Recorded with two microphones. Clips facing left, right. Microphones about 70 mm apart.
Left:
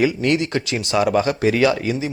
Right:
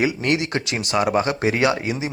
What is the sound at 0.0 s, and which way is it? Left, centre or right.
Speech, right.